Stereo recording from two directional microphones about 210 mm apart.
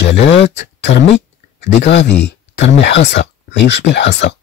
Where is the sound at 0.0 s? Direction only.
55° left (ahead or behind).